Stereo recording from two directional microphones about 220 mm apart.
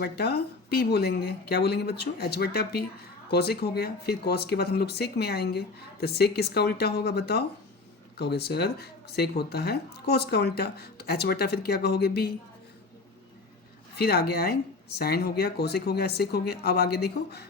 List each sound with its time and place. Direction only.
0.0 s a woman's voice: 45° left (ahead or behind)
13.9 s a woman's voice: 45° left (ahead or behind)